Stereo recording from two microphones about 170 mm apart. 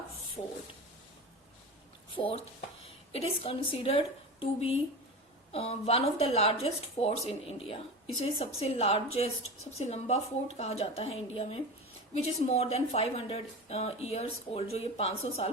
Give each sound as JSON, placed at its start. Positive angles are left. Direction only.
{"t": 2.1, "sound": "a woman's voice", "side_deg": 35}